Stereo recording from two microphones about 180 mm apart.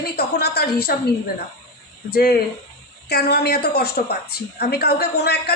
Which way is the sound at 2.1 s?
60° left (ahead or behind).